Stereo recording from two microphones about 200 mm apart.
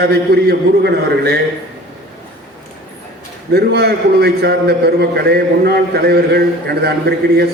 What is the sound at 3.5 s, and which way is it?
A man's voice, 55° right (ahead or behind).